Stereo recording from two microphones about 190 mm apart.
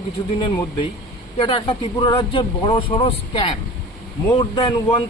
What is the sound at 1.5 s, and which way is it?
Speech, 25° left (ahead or behind).